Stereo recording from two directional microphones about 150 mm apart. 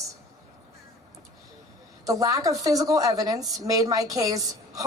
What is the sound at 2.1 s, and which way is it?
A woman's voice, 25° right (ahead or behind).